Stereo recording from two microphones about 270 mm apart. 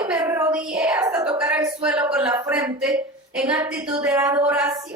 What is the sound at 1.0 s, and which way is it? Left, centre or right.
Speech, centre.